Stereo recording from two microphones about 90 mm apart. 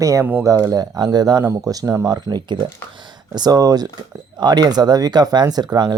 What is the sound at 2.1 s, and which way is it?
Speech, 55° right (ahead or behind).